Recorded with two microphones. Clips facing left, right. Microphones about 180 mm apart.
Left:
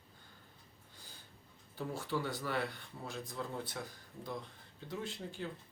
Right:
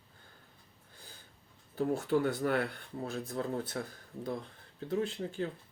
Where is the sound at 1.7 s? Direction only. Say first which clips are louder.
Right 9 dB; 55° right (ahead or behind).